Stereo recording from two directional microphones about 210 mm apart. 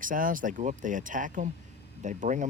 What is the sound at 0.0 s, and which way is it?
Speech, 40° right (ahead or behind).